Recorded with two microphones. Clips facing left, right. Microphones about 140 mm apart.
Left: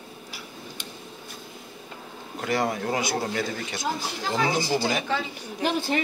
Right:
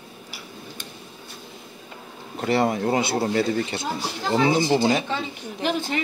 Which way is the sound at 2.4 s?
30° right (ahead or behind).